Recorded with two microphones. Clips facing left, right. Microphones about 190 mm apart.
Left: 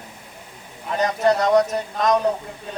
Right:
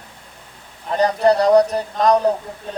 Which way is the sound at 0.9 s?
35° right (ahead or behind).